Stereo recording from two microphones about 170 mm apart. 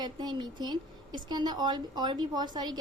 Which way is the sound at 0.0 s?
25° right (ahead or behind).